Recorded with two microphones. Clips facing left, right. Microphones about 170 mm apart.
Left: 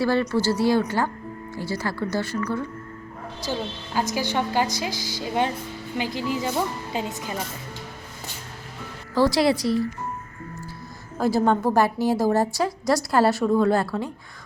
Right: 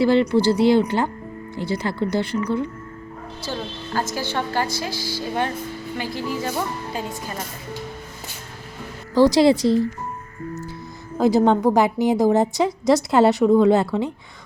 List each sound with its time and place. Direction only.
0.0 s a woman's voice: 20° right (ahead or behind)
3.4 s a woman's voice: 15° left (ahead or behind)
9.2 s a woman's voice: 25° right (ahead or behind)
11.2 s a woman's voice: 20° right (ahead or behind)